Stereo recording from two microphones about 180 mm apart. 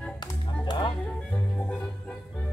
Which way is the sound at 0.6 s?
25° left (ahead or behind).